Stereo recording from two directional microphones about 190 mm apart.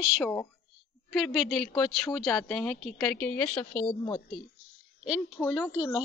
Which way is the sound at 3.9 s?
25° left (ahead or behind).